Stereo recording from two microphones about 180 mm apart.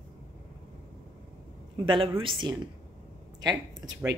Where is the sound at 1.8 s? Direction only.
30° right (ahead or behind).